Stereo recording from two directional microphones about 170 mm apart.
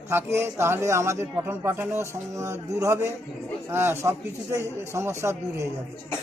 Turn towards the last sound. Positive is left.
turn(degrees=-15)  # may be behind; listen again after turning